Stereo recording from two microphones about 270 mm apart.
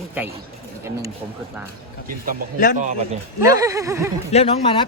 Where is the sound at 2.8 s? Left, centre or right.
Right.